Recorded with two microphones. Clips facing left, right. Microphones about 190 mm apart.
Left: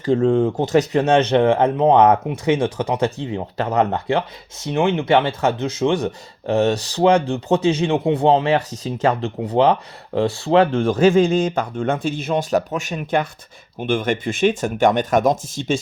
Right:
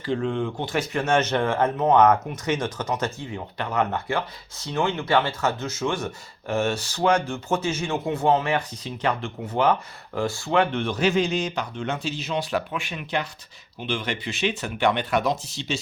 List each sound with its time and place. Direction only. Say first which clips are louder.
0.0 s speech: left 9 dB; 45° left (ahead or behind)
1.3 s speech: left 7 dB; 20° left (ahead or behind); by 3.8 s 40° left (ahead or behind)
3.9 s speech: left 6 dB; 20° left (ahead or behind)
6.6 s speech: left 7 dB; 35° left (ahead or behind)